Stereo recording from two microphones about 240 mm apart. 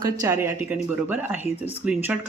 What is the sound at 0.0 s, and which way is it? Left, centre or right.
Speech, centre.